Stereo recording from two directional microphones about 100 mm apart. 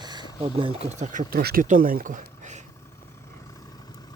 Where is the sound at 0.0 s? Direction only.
45° right (ahead or behind).